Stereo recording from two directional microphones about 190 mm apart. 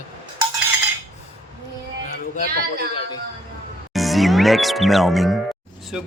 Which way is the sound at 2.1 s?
45° left (ahead or behind).